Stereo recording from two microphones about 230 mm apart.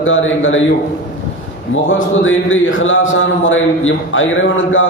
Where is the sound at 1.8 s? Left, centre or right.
Left.